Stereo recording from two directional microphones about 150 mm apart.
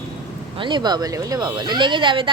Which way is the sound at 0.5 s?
30° right (ahead or behind).